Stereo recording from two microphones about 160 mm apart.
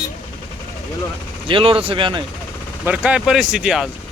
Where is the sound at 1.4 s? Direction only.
35° right (ahead or behind).